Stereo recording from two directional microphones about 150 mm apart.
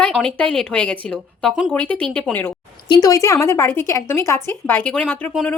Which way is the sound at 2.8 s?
25° left (ahead or behind).